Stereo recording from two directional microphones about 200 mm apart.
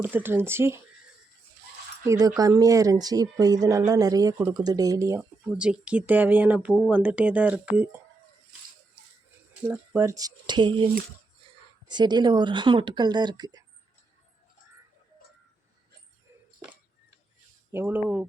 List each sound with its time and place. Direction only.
0.0 s speech: 10° right (ahead or behind)
2.0 s speech: 15° right (ahead or behind)
9.6 s speech: 10° right (ahead or behind)
17.7 s speech: 10° right (ahead or behind)